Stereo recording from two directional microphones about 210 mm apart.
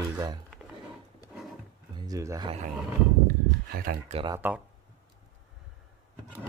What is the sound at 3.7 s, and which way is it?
Speech, 45° right (ahead or behind).